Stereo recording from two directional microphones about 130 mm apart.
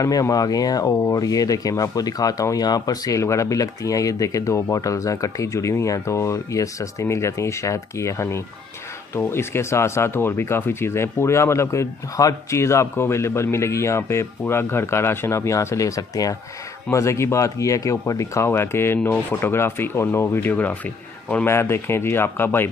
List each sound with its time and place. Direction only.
0.0 s speech: 25° left (ahead or behind)